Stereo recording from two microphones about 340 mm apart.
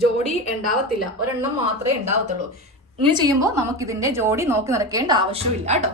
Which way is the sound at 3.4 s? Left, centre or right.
Centre.